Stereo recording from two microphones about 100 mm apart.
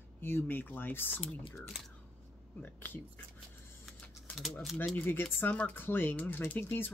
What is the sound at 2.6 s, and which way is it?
Speech, 20° left (ahead or behind).